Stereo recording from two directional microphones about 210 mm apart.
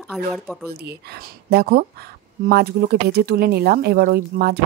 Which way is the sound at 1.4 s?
50° right (ahead or behind).